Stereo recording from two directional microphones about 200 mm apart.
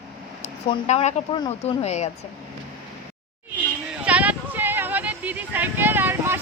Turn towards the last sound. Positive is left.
turn(degrees=-10)  # may be behind; listen again after turning